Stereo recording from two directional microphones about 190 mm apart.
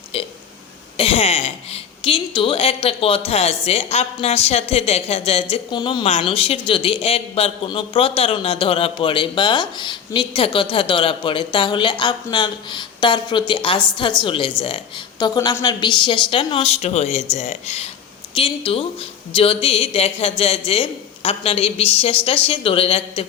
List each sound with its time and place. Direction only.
0.9 s a woman's voice: 30° left (ahead or behind)